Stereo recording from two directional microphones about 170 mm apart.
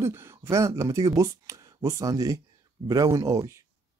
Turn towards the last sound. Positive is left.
turn(degrees=-20)  # may be behind; listen again after turning